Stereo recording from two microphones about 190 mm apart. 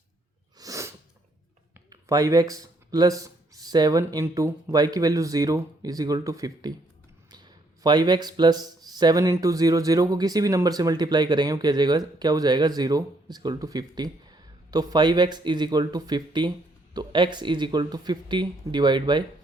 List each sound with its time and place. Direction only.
0.6 s sneeze: 15° right (ahead or behind)
1.9 s speech: 20° right (ahead or behind)